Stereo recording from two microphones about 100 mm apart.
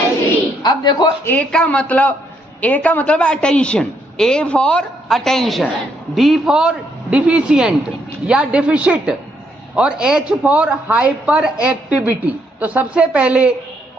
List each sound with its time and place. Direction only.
0.6 s a man's voice: 45° left (ahead or behind)
1.2 s a woman's voice: 15° left (ahead or behind); by 13.5 s 15° right (ahead or behind)